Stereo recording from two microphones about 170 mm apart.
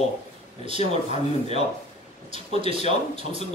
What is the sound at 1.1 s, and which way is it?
Speech, 40° left (ahead or behind).